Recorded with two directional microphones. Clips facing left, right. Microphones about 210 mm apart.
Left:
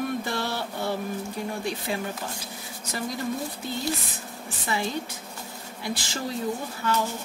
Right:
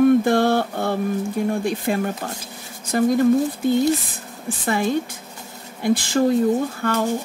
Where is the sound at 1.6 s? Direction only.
55° right (ahead or behind).